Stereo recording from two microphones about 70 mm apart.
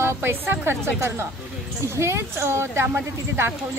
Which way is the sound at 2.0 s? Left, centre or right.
Right.